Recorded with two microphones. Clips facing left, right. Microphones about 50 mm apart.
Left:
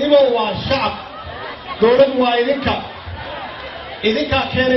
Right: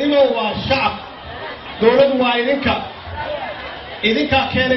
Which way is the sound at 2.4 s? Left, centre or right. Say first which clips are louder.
Right 1 dB; right.